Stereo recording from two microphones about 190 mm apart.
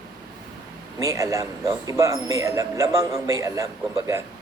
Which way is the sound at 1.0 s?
15° right (ahead or behind).